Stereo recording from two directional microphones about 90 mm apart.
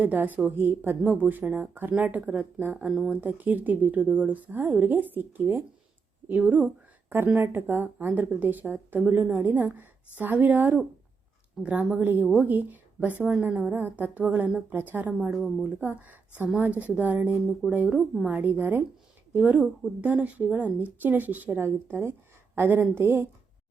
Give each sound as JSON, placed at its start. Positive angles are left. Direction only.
{"t": 0.0, "sound": "speech", "side_deg": -20}
{"t": 15.3, "sound": "speech", "side_deg": 0}
{"t": 15.8, "sound": "speech", "side_deg": -20}